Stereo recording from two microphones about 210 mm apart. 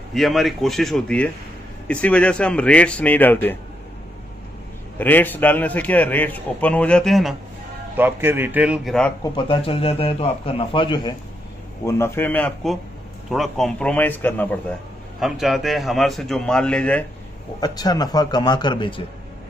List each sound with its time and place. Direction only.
0.1 s a man's voice: centre (ahead or behind)
4.9 s a man's voice: 10° left (ahead or behind)
8.0 s speech: 10° right (ahead or behind)
9.2 s a man's voice: 20° left (ahead or behind)
11.8 s a man's voice: 15° left (ahead or behind)
17.6 s a man's voice: 20° left (ahead or behind)